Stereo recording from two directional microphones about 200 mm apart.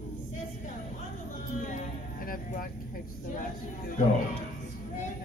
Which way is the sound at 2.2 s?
45° left (ahead or behind).